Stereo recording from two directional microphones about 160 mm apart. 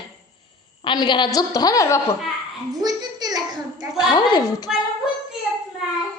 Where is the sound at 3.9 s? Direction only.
25° left (ahead or behind).